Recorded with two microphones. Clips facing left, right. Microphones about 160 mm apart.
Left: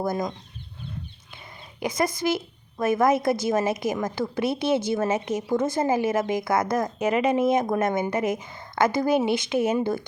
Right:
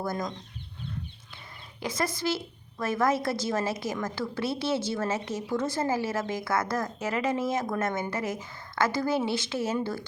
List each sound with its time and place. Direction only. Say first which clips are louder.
0.0 s a woman's voice: left 5 dB; 10° left (ahead or behind)
1.8 s a woman's voice: left 5 dB; 15° left (ahead or behind)